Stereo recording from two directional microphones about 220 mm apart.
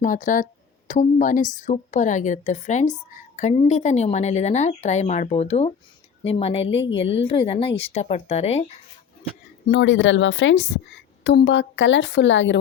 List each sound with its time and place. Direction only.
0.0 s a woman's voice: 35° left (ahead or behind)
9.3 s a woman's voice: 50° left (ahead or behind)